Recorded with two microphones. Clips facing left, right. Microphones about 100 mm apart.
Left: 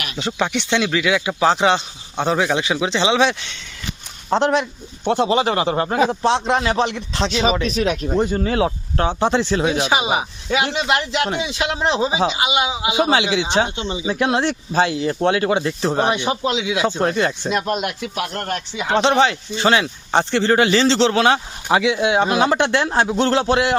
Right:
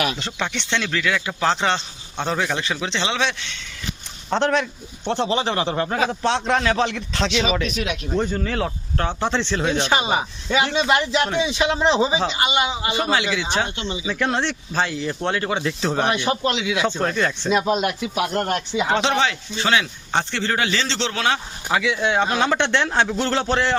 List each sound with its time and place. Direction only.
0.2 s speech: 10° left (ahead or behind)
4.4 s speech: 15° left (ahead or behind)
5.5 s speech: 45° left (ahead or behind)
5.9 s speech: 30° left (ahead or behind)
6.4 s speech: 5° left (ahead or behind)
6.9 s speech: 35° left (ahead or behind)
8.5 s speech: 20° left (ahead or behind)
16.0 s speech: 20° left (ahead or behind)
17.7 s speech: centre (ahead or behind)
18.2 s speech: 15° right (ahead or behind)
19.3 s speech: 40° left (ahead or behind)
21.3 s speech: 25° left (ahead or behind); by 22.9 s 10° left (ahead or behind)
23.0 s speech: 20° left (ahead or behind)